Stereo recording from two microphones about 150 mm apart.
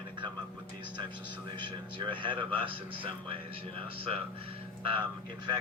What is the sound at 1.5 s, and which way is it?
A man's voice, 30° right (ahead or behind).